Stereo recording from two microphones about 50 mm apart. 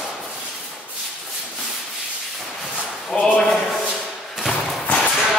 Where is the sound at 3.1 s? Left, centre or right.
Left.